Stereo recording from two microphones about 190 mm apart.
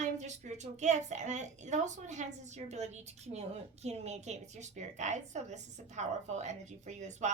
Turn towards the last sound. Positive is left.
turn(degrees=-40)  # may be behind; listen again after turning